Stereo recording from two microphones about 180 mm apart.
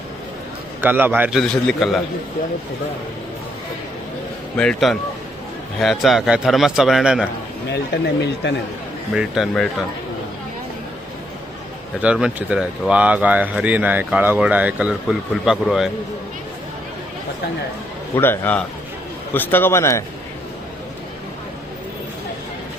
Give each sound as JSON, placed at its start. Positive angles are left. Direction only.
{"t": 0.8, "sound": "speech", "side_deg": -10}
{"t": 1.4, "sound": "a man's voice", "side_deg": 0}
{"t": 4.5, "sound": "a man's voice", "side_deg": 5}
{"t": 7.7, "sound": "speech", "side_deg": 70}
{"t": 9.1, "sound": "a man's voice", "side_deg": 0}
{"t": 12.0, "sound": "speech", "side_deg": -5}
{"t": 18.1, "sound": "speech", "side_deg": 10}